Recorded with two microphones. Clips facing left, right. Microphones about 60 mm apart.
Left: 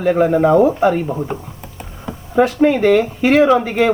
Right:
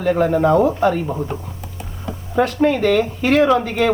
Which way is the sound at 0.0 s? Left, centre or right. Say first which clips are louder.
Left 2 dB; centre.